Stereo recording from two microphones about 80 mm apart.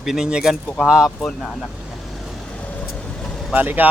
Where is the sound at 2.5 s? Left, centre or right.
Centre.